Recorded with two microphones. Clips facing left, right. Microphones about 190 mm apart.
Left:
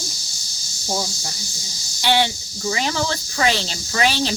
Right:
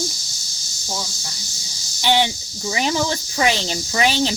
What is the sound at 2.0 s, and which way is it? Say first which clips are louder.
Speech: right 1 dB; 15° right (ahead or behind).